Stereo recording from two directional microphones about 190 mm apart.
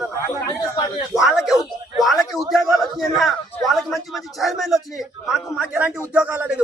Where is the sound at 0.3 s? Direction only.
20° left (ahead or behind).